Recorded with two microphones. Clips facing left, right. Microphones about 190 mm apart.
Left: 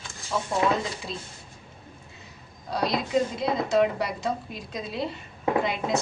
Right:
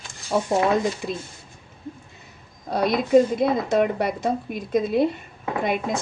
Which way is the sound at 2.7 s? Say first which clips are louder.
Right 8 dB; 55° right (ahead or behind).